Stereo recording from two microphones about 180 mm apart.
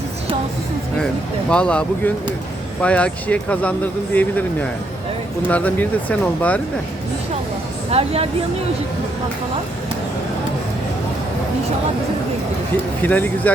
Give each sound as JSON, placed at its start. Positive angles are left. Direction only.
{"t": 1.5, "sound": "speech", "side_deg": 5}
{"t": 5.5, "sound": "speech", "side_deg": 10}
{"t": 7.9, "sound": "speech", "side_deg": -35}
{"t": 13.0, "sound": "speech", "side_deg": 10}